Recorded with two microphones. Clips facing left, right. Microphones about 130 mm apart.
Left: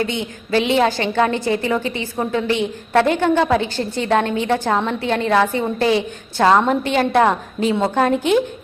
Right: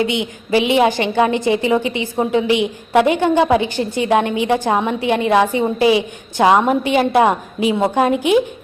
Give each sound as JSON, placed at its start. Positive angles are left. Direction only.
{"t": 0.0, "sound": "a woman's voice", "side_deg": -15}